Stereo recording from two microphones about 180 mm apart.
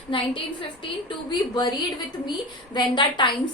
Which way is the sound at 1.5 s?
25° left (ahead or behind).